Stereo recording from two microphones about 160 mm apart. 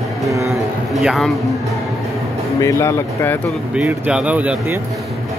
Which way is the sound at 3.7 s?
5° right (ahead or behind).